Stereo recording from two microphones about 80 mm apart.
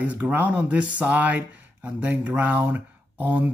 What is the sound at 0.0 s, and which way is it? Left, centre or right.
Speech, centre.